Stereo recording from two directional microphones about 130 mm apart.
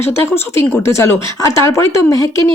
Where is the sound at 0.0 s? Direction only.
20° left (ahead or behind).